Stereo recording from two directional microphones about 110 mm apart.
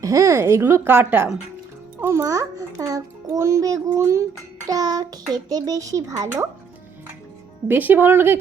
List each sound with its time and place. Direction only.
0.0 s a child's voice: 30° right (ahead or behind)
6.2 s a child's voice: 20° right (ahead or behind)
7.7 s a child's voice: 15° right (ahead or behind)